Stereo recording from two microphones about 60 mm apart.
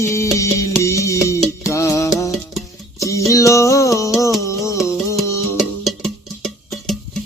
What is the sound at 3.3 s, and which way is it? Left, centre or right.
Music, left.